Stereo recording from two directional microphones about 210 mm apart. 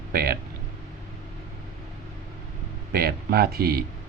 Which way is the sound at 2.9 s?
45° right (ahead or behind).